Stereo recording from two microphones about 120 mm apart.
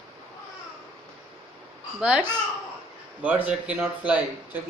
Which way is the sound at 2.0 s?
10° right (ahead or behind).